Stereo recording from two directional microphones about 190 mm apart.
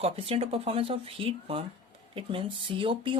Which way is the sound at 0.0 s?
30° right (ahead or behind).